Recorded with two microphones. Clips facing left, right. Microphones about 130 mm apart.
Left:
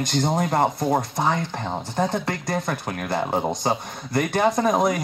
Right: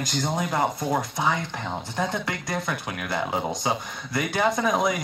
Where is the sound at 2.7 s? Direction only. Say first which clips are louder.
Left 3 dB; 40° left (ahead or behind).